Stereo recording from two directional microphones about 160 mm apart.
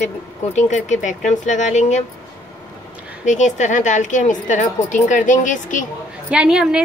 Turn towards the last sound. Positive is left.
turn(degrees=-5)  # may be behind; listen again after turning